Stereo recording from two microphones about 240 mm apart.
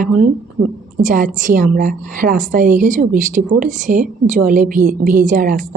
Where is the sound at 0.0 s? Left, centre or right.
Right.